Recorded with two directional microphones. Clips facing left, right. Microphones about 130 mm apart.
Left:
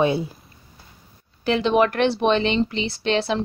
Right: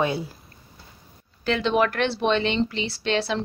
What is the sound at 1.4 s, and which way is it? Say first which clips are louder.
A woman's voice: left 3 dB; 15° left (ahead or behind).